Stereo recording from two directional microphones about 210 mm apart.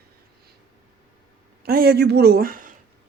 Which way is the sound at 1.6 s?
45° right (ahead or behind).